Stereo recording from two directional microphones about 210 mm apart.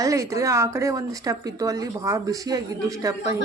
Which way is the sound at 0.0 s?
15° right (ahead or behind).